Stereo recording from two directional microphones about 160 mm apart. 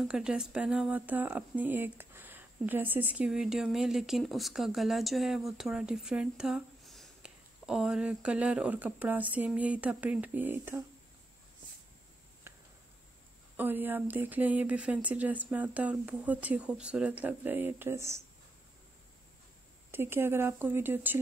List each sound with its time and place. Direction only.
0.0 s speech: 5° right (ahead or behind)
12.5 s a sound: 15° right (ahead or behind)
13.6 s speech: 10° right (ahead or behind)
19.9 s speech: 15° right (ahead or behind)